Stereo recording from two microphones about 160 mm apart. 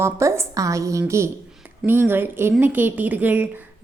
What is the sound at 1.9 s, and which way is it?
A woman's voice, 15° right (ahead or behind).